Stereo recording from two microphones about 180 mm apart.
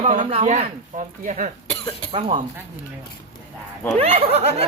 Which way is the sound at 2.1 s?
30° right (ahead or behind).